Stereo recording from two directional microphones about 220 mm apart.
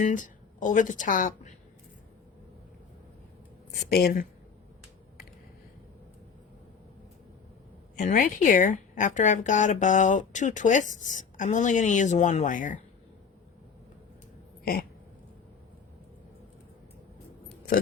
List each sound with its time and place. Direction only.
0.0 s a woman's voice: 35° left (ahead or behind)
3.8 s speech: 45° left (ahead or behind)
7.9 s a woman's voice: 40° left (ahead or behind)
14.6 s a sound: 45° left (ahead or behind)